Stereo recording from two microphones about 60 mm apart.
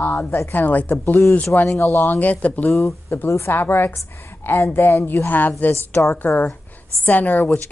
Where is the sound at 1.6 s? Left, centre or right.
Left.